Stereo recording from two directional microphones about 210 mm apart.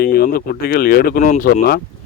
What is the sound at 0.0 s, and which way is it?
Speech, 45° left (ahead or behind).